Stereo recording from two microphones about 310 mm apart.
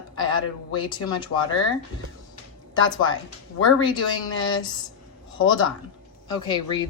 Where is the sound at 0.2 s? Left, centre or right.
Left.